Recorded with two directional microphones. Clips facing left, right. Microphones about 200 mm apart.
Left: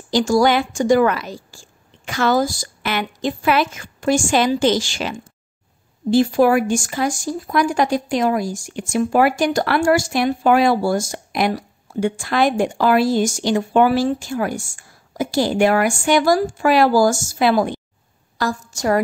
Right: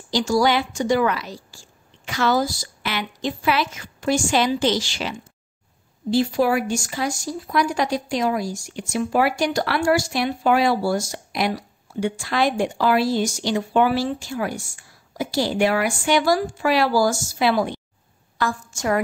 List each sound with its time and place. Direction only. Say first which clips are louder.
0.1 s speech: left 4 dB; 50° left (ahead or behind)
18.4 s a woman's voice: left 3 dB; 40° left (ahead or behind)